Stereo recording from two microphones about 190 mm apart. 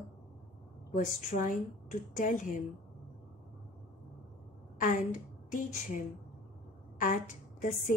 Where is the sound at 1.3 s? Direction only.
50° left (ahead or behind).